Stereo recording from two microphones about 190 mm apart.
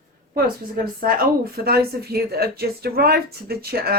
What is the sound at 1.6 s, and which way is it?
A woman's voice, 55° right (ahead or behind).